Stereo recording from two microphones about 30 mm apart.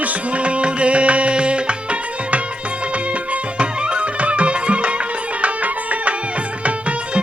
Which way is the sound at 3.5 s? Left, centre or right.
Right.